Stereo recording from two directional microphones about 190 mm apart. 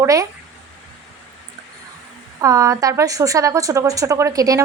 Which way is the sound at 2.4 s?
15° right (ahead or behind).